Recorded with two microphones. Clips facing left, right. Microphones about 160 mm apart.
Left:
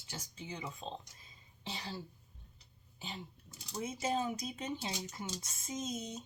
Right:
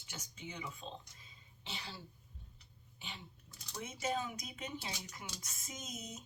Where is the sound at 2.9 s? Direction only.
40° left (ahead or behind).